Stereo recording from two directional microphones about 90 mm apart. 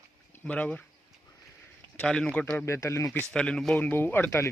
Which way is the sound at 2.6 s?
35° left (ahead or behind).